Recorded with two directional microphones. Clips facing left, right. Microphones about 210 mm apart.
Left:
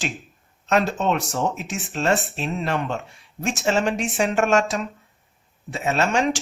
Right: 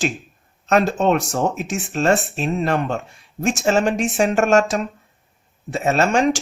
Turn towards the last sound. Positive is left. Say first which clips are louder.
# right 4 dB
turn(degrees=-45)  # may be behind; listen again after turning